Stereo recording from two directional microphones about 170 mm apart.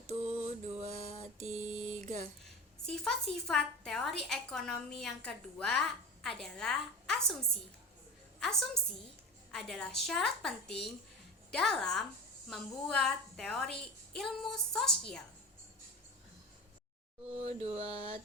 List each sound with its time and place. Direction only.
0.1 s mantra: 40° right (ahead or behind)
2.4 s a woman's voice: 5° left (ahead or behind)
8.4 s a woman's voice: centre (ahead or behind)
17.3 s mantra: 35° right (ahead or behind)